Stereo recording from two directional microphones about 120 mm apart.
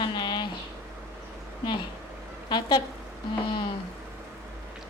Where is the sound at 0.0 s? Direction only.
40° left (ahead or behind).